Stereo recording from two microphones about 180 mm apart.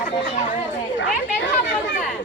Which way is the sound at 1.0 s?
90° left.